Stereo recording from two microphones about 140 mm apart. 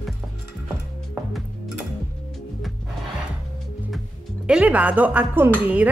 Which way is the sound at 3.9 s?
5° right (ahead or behind).